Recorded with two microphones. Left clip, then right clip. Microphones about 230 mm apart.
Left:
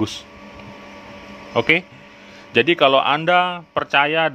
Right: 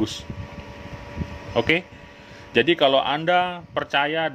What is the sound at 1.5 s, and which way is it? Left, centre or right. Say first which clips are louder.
A man's voice: left 4 dB; centre.